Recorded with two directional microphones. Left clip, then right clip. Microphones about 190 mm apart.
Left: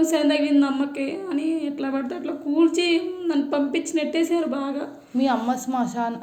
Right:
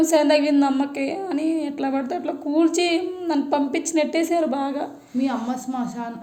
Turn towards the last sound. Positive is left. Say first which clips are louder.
# left 3 dB
turn(degrees=20)  # may be behind; listen again after turning